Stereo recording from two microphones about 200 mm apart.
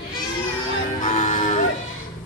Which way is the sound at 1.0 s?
40° left (ahead or behind).